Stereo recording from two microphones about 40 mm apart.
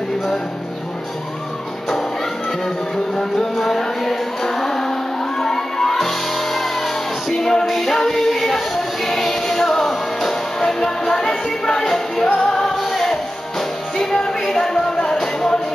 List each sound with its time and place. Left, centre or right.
3.2 s music: centre
12.7 s music: centre